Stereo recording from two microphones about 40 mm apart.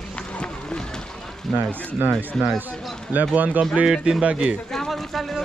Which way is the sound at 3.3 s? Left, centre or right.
Right.